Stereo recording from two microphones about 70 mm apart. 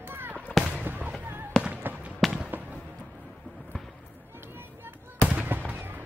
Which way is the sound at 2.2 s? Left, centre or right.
Centre.